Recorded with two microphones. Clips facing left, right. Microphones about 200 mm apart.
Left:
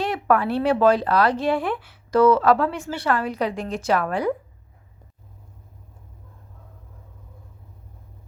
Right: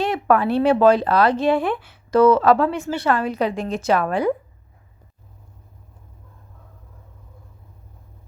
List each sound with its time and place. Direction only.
0.0 s speech: 25° right (ahead or behind)